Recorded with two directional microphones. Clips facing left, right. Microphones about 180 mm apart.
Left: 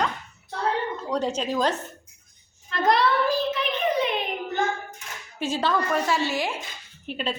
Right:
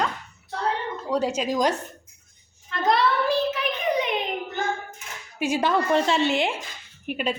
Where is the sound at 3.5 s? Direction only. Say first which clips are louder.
Even; 10° right (ahead or behind).